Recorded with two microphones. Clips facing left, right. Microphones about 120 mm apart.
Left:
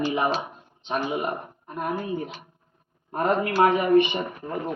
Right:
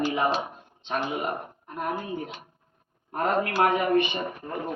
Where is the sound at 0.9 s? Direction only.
15° left (ahead or behind).